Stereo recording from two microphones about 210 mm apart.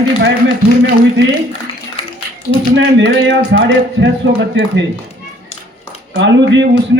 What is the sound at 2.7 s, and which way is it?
Speech, 60° right (ahead or behind).